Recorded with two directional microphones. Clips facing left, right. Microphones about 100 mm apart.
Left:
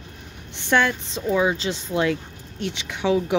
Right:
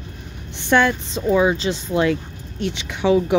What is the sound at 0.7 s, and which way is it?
Speech, 20° right (ahead or behind).